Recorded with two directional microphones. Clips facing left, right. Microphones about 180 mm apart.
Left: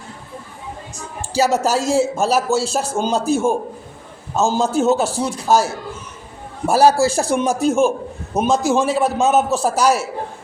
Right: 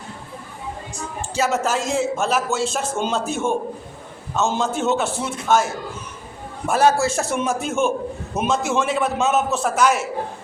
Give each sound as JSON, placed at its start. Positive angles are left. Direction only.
{"t": 1.3, "sound": "speech", "side_deg": 35}
{"t": 6.7, "sound": "speech", "side_deg": 35}